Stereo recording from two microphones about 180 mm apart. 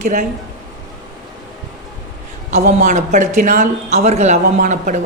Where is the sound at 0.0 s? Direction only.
45° right (ahead or behind).